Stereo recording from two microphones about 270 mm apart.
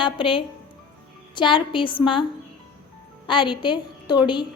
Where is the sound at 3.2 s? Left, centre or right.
Centre.